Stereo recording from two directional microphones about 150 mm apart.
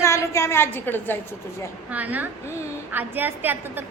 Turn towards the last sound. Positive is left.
turn(degrees=-15)  # may be behind; listen again after turning